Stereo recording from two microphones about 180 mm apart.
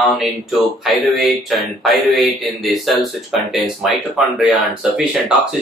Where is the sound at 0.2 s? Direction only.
Centre (ahead or behind).